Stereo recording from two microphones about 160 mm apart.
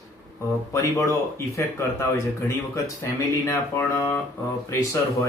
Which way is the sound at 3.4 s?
15° left (ahead or behind).